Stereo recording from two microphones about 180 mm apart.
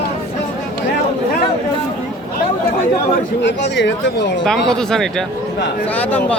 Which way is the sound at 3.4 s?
85° left.